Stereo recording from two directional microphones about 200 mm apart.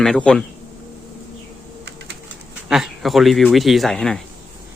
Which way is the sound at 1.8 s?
55° right (ahead or behind).